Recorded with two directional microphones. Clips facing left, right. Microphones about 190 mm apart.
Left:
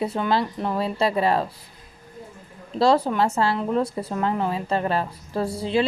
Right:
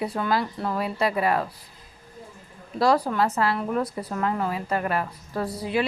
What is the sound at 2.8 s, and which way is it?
A woman's voice, 25° left (ahead or behind).